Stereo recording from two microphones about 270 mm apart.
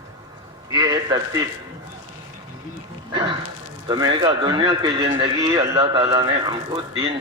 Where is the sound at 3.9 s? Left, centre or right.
Centre.